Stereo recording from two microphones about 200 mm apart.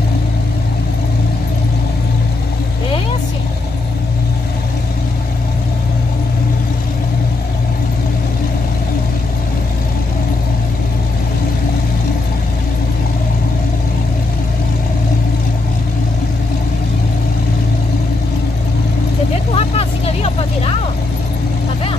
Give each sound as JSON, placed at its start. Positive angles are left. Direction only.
{"t": 19.5, "sound": "vehicle", "side_deg": 30}